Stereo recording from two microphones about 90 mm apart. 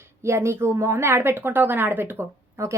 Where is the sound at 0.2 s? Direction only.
30° right (ahead or behind).